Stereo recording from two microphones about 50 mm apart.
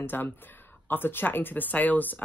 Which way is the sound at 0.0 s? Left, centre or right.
Left.